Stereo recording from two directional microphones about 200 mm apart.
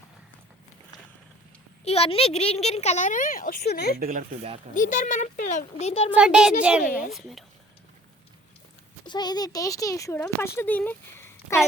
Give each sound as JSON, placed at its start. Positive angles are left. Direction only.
{"t": 1.8, "sound": "a woman's voice", "side_deg": 30}
{"t": 4.7, "sound": "a woman's voice", "side_deg": 40}
{"t": 6.1, "sound": "a child's voice", "side_deg": -5}
{"t": 9.0, "sound": "a child's voice", "side_deg": 20}